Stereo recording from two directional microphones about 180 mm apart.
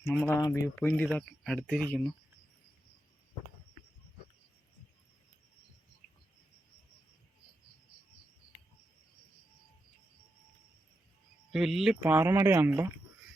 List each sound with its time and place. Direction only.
0.3 s speech: 20° left (ahead or behind)
0.9 s speech: 5° left (ahead or behind)
11.5 s speech: 5° right (ahead or behind)